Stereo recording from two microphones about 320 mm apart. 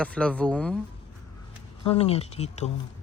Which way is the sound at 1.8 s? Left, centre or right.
Centre.